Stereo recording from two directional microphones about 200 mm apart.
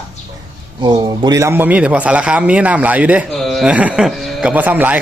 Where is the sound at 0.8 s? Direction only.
20° right (ahead or behind).